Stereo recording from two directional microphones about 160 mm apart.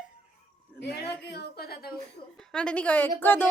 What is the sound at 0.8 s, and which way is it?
A woman's voice, 90° left.